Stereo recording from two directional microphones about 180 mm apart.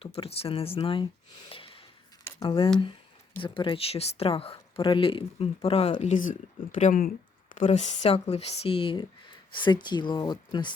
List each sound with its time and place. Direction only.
0.0 s speech: 35° left (ahead or behind)
1.5 s snort: 30° left (ahead or behind)
2.4 s speech: 30° left (ahead or behind)